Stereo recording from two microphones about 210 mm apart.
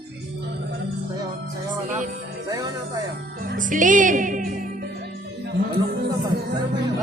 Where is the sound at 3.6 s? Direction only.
40° right (ahead or behind).